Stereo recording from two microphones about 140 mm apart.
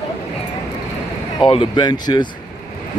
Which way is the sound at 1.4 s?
40° left (ahead or behind).